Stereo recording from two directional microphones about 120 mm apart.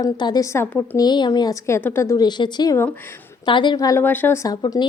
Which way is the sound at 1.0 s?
35° left (ahead or behind).